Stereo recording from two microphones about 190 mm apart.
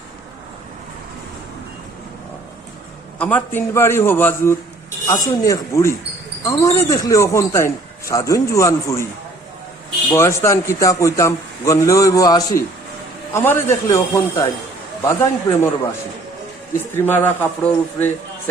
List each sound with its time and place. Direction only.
3.2 s speech: 10° left (ahead or behind)
10.1 s speech: 15° left (ahead or behind)
16.9 s speech: 10° left (ahead or behind)